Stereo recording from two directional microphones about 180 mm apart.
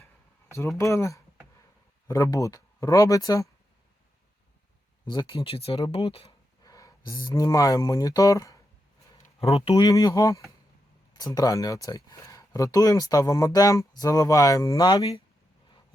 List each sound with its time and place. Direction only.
0.8 s speech: 15° left (ahead or behind)
5.0 s speech: 25° left (ahead or behind)
6.7 s speech: 20° left (ahead or behind)
9.2 s speech: 35° left (ahead or behind)